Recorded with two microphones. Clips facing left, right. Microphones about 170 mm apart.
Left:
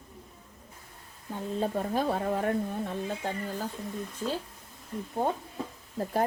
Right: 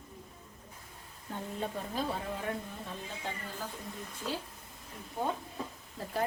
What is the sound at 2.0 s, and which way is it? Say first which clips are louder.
Speech: left 7 dB; 55° left (ahead or behind).